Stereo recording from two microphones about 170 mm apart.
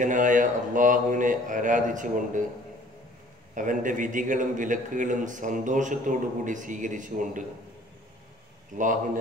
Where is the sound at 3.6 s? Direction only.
50° right (ahead or behind).